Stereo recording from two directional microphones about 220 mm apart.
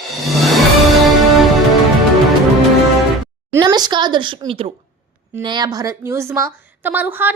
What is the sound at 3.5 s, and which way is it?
A woman's voice, 20° right (ahead or behind).